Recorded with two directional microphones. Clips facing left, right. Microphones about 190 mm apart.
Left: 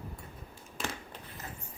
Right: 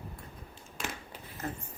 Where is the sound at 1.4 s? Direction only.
55° right (ahead or behind).